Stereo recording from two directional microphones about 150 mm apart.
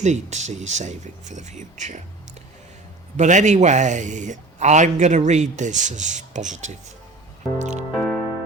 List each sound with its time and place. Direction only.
0.0 s speech: 50° right (ahead or behind)
3.2 s speech: 55° right (ahead or behind)
7.9 s music: 5° left (ahead or behind)